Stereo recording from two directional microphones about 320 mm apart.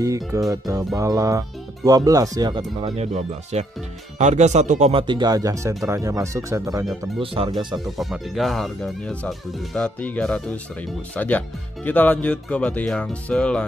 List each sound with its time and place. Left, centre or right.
0.0 s speech: centre
7.8 s speech: centre